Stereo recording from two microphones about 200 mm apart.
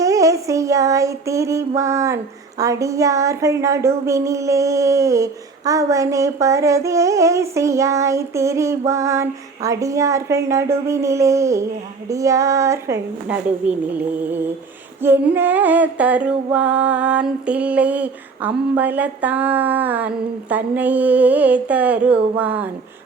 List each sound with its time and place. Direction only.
0.0 s music: 15° right (ahead or behind)